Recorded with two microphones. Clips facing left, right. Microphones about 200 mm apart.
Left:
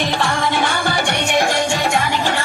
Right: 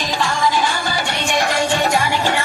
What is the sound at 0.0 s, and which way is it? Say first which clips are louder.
Music: even; 60° left (ahead or behind).